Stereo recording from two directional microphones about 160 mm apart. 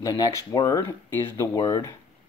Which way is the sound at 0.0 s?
20° left (ahead or behind).